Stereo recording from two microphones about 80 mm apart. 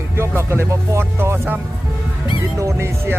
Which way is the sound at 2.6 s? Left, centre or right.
Right.